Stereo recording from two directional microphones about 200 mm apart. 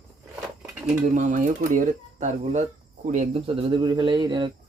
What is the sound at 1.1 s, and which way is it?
Speech, 40° right (ahead or behind).